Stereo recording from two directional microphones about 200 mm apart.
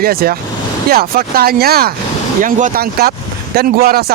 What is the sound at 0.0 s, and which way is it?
Speech, 50° right (ahead or behind).